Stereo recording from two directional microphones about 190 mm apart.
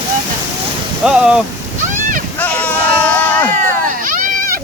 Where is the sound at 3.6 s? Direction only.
45° right (ahead or behind).